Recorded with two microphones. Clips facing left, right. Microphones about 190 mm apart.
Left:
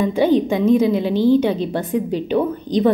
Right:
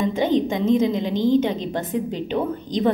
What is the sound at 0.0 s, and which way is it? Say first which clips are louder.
A woman's voice: left 4 dB; 20° right (ahead or behind).